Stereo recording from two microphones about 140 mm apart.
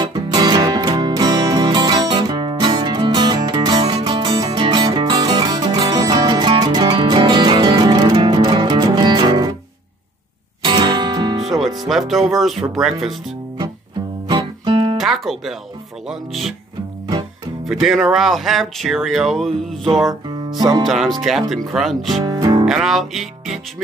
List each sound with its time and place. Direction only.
0.0 s music: 30° right (ahead or behind)
10.6 s music: 30° right (ahead or behind)
11.4 s music: centre (ahead or behind)
12.7 s speech: centre (ahead or behind)
14.2 s guitar: 35° right (ahead or behind)
15.0 s music: centre (ahead or behind)
16.1 s speech: centre (ahead or behind)
17.6 s speech: centre (ahead or behind)
20.2 s music: 30° right (ahead or behind)
20.8 s speech: centre (ahead or behind)
22.2 s music: 30° right (ahead or behind)
22.7 s music: centre (ahead or behind)